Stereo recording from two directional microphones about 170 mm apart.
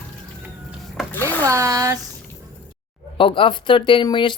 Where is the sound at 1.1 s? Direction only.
10° left (ahead or behind).